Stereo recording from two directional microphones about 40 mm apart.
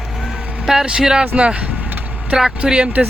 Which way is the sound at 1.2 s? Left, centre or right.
Right.